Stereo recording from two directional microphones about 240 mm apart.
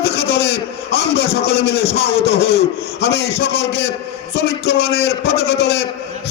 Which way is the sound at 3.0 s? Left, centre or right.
Left.